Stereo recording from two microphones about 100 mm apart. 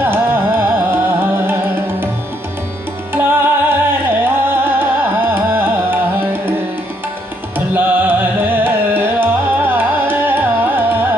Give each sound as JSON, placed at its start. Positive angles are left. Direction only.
{"t": 0.0, "sound": "music", "side_deg": -20}
{"t": 3.1, "sound": "music", "side_deg": -20}
{"t": 5.3, "sound": "carnatic music", "side_deg": -20}
{"t": 7.5, "sound": "carnatic music", "side_deg": -20}